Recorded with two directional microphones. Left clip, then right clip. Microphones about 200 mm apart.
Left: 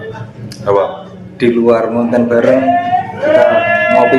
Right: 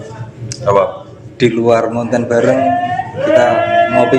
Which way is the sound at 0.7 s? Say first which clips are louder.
Right 1 dB; 25° right (ahead or behind).